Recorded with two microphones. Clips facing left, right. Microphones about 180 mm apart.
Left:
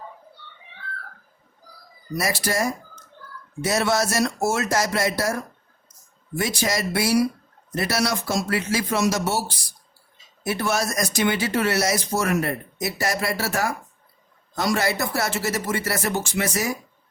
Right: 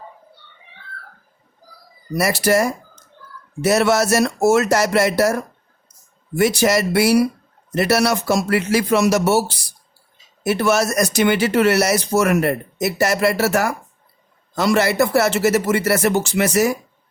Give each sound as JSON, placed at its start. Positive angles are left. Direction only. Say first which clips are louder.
{"t": 2.1, "sound": "speech", "louder": "right 7 dB", "side_deg": -70}
{"t": 6.4, "sound": "speech", "louder": "right 9 dB", "side_deg": -70}
{"t": 10.4, "sound": "speech", "louder": "right 7 dB", "side_deg": -75}